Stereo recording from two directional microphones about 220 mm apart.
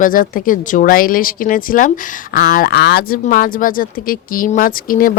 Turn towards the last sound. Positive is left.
turn(degrees=40)  # may be behind; listen again after turning